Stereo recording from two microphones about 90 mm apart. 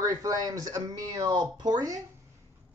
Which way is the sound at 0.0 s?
40° right (ahead or behind).